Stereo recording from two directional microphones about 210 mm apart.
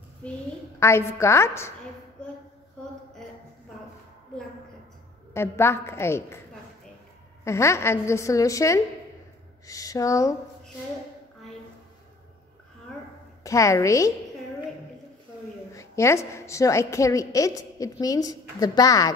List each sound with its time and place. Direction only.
0.7 s a woman's voice: 15° left (ahead or behind)
2.2 s child singing: 5° left (ahead or behind)
5.3 s a woman's voice: 10° left (ahead or behind)
7.4 s a woman's voice: 15° left (ahead or behind)
13.4 s a woman's voice: 15° left (ahead or behind)
15.7 s a woman's voice: 15° left (ahead or behind)